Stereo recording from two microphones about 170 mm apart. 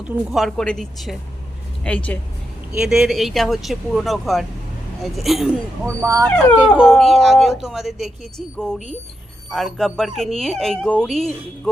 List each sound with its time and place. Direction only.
0.0 s speech: 5° right (ahead or behind)
5.8 s speech: 15° right (ahead or behind)
6.7 s speech: centre (ahead or behind)